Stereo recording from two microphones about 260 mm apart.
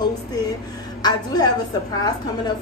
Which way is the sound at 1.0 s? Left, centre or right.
Centre.